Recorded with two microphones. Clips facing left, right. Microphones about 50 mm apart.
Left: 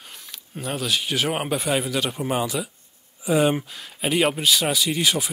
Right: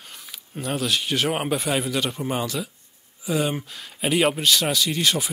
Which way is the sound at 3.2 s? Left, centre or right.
Left.